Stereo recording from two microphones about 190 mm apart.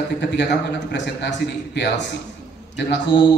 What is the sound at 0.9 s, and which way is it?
A man's voice, 65° left (ahead or behind).